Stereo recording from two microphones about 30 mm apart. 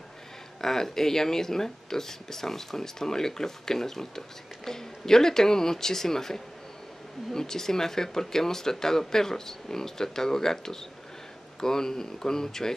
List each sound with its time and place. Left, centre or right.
0.6 s speech: centre